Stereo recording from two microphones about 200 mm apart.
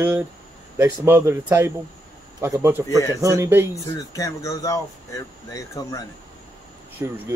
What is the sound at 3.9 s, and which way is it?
Speech, 15° left (ahead or behind).